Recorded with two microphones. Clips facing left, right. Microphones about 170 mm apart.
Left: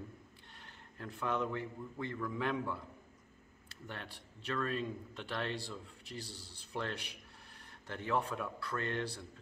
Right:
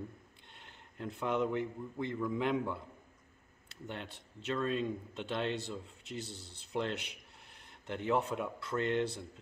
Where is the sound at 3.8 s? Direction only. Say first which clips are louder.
Right 4 dB; 20° right (ahead or behind).